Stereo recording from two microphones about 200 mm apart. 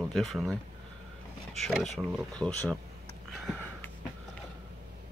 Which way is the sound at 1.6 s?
Centre (ahead or behind).